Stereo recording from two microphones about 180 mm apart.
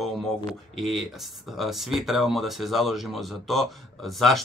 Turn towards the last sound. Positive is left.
turn(degrees=0)  # may be behind; listen again after turning